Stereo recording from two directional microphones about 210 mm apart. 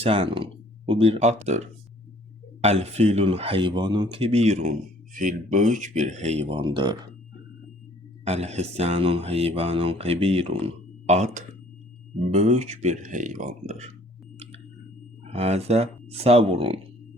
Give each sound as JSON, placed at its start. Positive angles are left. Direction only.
{"t": 0.0, "sound": "speech", "side_deg": -25}
{"t": 8.2, "sound": "speech", "side_deg": -30}
{"t": 15.2, "sound": "speech", "side_deg": -30}